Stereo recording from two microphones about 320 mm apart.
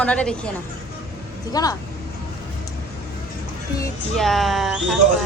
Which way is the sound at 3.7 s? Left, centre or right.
Centre.